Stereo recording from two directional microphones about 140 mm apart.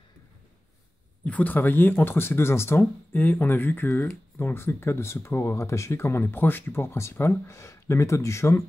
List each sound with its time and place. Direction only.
1.2 s speech: 10° left (ahead or behind)